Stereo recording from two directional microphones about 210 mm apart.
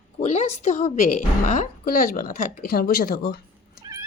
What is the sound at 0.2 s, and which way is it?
A woman's voice, 30° left (ahead or behind).